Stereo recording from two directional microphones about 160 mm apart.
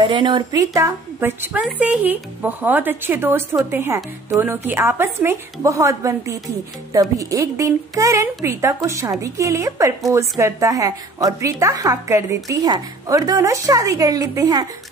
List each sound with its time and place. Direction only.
0.0 s speech: 30° right (ahead or behind)